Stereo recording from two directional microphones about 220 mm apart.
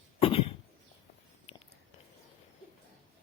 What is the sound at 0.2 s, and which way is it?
Cough, 25° left (ahead or behind).